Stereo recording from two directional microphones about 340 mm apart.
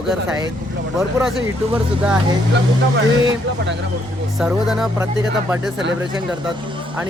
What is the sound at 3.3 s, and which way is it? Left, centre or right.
Speech, right.